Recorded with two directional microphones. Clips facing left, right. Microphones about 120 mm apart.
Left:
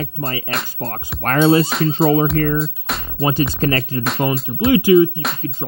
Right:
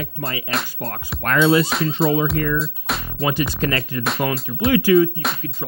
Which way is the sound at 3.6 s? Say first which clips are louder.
Left 3 dB; 35° left (ahead or behind).